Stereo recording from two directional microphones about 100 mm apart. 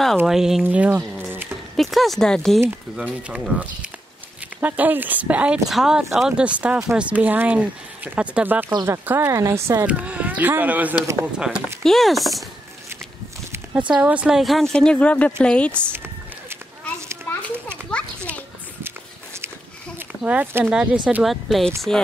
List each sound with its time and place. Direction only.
0.3 s speech: 5° right (ahead or behind)
0.7 s speech: 15° right (ahead or behind)
1.3 s a sound: 20° right (ahead or behind)
1.8 s speech: centre (ahead or behind)
3.0 s speech: 15° right (ahead or behind); by 9.8 s 30° right (ahead or behind)
9.8 s speech: 15° right (ahead or behind)
13.7 s speech: 10° right (ahead or behind); by 15.9 s 10° left (ahead or behind)
20.2 s speech: 15° right (ahead or behind); by 22.0 s 5° left (ahead or behind)